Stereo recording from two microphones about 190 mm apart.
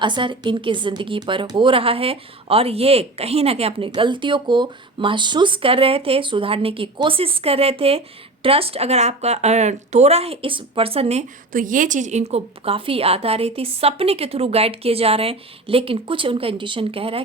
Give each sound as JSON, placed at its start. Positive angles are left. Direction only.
{"t": 0.0, "sound": "a woman's voice", "side_deg": -25}